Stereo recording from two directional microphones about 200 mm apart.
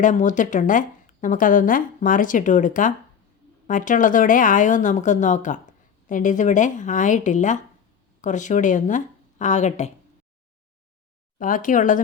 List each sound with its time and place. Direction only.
0.0 s speech: 40° left (ahead or behind)
11.3 s speech: 40° left (ahead or behind)